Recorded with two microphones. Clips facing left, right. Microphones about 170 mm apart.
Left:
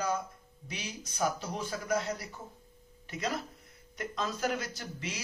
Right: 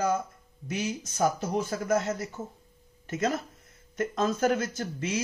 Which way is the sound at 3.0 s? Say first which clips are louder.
Right 7 dB; 45° right (ahead or behind).